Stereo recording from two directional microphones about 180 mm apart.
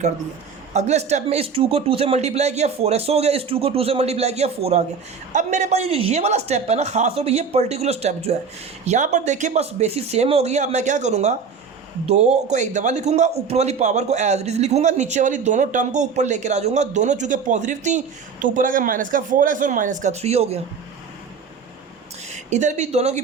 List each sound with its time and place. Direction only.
0.7 s speech: 40° right (ahead or behind)
22.3 s speech: 40° right (ahead or behind)